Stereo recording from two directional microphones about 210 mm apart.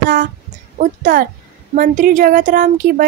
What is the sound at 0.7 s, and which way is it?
Speech, 40° right (ahead or behind).